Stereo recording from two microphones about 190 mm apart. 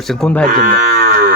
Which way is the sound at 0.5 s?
50° right (ahead or behind).